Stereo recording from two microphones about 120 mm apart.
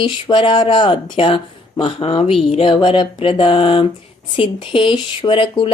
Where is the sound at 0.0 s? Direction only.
45° left (ahead or behind).